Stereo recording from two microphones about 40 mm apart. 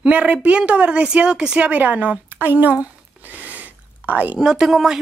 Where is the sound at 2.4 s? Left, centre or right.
Right.